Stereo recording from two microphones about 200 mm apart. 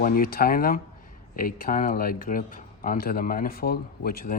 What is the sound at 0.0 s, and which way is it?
Speech, 45° left (ahead or behind).